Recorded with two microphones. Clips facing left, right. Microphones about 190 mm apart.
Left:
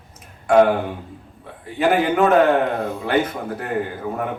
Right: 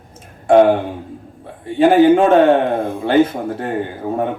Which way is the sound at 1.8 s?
30° right (ahead or behind).